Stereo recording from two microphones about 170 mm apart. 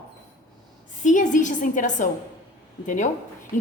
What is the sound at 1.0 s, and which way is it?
A woman's voice, 45° left (ahead or behind).